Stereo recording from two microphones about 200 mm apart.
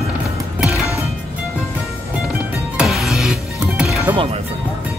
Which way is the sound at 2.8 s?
Centre (ahead or behind).